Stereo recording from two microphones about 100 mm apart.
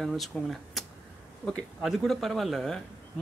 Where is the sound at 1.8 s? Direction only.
Centre (ahead or behind).